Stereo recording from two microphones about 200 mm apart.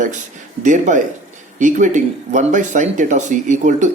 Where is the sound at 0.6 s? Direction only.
40° right (ahead or behind).